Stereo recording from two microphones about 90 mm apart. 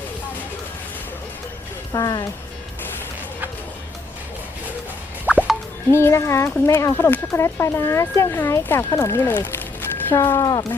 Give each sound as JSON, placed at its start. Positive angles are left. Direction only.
{"t": 1.9, "sound": "speech", "side_deg": 45}
{"t": 5.2, "sound": "plop", "side_deg": -20}
{"t": 5.9, "sound": "speech", "side_deg": 30}
{"t": 10.4, "sound": "speech", "side_deg": 45}